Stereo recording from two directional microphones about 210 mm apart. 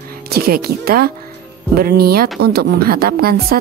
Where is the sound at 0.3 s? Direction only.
45° right (ahead or behind).